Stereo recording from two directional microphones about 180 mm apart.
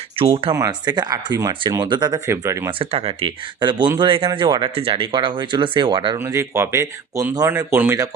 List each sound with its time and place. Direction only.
0.2 s speech: 30° right (ahead or behind)
0.5 s speech: 20° right (ahead or behind)
2.6 s speech: 30° right (ahead or behind)
6.5 s speech: 15° right (ahead or behind)